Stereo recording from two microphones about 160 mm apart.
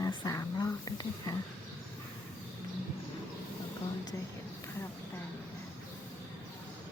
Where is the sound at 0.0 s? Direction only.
25° left (ahead or behind).